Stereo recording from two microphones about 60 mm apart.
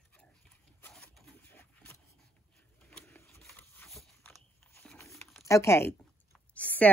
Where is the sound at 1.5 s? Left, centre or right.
Left.